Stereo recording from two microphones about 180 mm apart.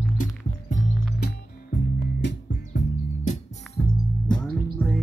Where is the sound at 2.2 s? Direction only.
70° left (ahead or behind).